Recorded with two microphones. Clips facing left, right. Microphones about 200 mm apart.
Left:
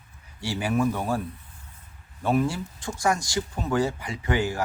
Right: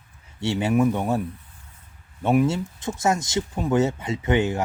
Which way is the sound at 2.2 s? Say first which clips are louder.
Right 4 dB; 20° right (ahead or behind).